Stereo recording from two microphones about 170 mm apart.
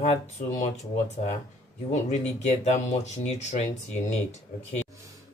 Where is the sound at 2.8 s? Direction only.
40° left (ahead or behind).